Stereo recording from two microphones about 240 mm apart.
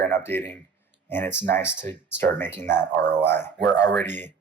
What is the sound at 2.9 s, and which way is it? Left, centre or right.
Speech, right.